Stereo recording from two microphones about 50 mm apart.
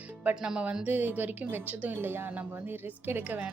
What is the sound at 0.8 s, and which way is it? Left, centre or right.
A woman's voice, right.